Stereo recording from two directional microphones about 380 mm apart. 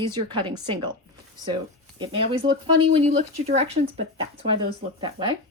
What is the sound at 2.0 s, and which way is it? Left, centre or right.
Speech, centre.